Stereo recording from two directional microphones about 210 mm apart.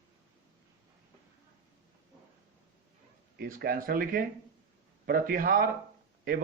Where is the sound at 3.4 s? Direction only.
45° right (ahead or behind).